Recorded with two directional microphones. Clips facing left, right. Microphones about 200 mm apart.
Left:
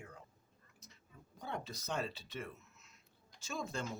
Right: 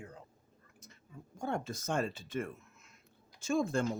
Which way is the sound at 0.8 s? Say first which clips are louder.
Right 8 dB; 50° right (ahead or behind).